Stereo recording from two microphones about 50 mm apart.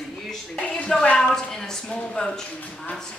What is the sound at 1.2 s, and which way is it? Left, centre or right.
Speech, centre.